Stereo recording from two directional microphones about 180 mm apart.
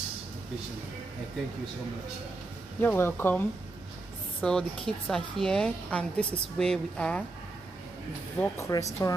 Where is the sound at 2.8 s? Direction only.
10° left (ahead or behind).